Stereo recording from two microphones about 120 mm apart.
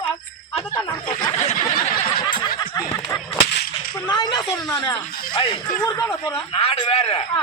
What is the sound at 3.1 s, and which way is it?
Speech, 25° left (ahead or behind).